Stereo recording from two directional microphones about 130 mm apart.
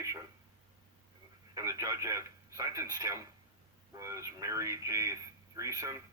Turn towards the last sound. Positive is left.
turn(degrees=-25)  # may be behind; listen again after turning